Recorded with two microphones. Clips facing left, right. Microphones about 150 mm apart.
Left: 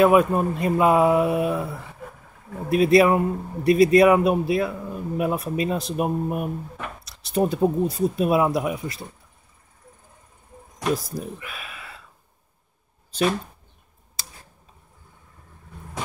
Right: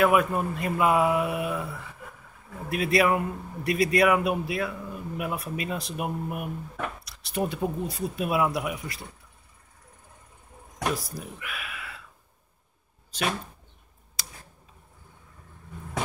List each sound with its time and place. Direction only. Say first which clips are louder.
0.0 s a man's voice: left 5 dB; 25° left (ahead or behind)
11.1 s speech: left 6 dB; 30° left (ahead or behind)